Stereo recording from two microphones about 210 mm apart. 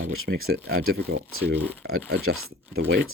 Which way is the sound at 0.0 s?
75° right (ahead or behind).